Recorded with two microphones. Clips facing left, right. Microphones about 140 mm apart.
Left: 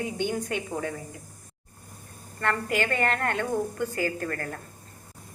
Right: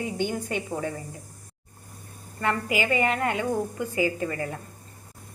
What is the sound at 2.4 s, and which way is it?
A woman's voice, 5° right (ahead or behind).